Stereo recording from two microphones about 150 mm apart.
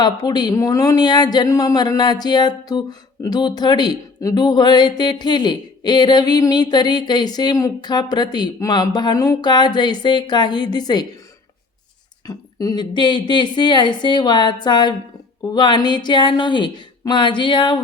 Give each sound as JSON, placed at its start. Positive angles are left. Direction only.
{"t": 0.0, "sound": "speech", "side_deg": 25}
{"t": 12.2, "sound": "a woman's voice", "side_deg": 25}